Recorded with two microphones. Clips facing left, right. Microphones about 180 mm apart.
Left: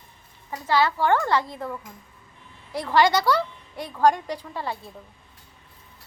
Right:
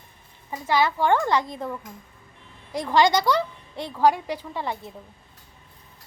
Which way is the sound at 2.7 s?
15° right (ahead or behind).